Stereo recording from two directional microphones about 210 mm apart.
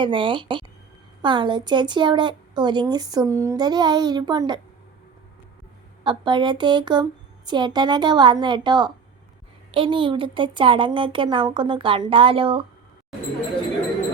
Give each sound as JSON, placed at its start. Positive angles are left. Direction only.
{"t": 0.0, "sound": "a woman's voice", "side_deg": -25}
{"t": 6.1, "sound": "a woman's voice", "side_deg": -20}